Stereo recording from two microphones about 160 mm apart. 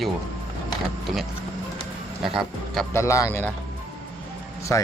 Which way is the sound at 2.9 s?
20° left (ahead or behind).